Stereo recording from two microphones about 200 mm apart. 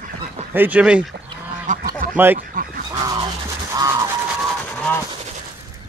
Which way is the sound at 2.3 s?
45° right (ahead or behind).